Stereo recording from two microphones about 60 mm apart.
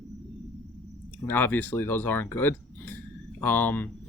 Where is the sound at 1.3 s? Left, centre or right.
Left.